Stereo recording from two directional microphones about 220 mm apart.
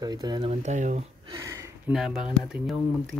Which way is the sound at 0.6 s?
35° right (ahead or behind).